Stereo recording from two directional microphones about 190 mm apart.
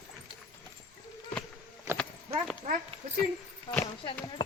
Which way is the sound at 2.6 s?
45° right (ahead or behind).